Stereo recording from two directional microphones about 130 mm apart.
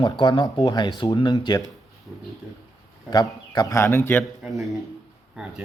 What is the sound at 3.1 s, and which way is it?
Speech, 30° left (ahead or behind).